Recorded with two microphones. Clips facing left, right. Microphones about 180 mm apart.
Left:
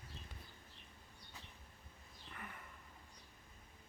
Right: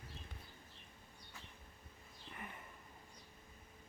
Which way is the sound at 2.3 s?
20° right (ahead or behind).